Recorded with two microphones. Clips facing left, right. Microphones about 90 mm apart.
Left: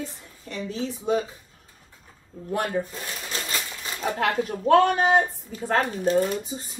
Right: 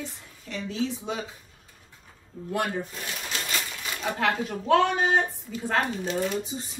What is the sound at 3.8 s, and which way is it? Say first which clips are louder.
Speech: left 2 dB; 40° left (ahead or behind).